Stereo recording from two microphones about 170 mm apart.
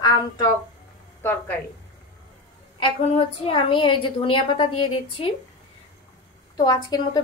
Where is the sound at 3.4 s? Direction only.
30° left (ahead or behind).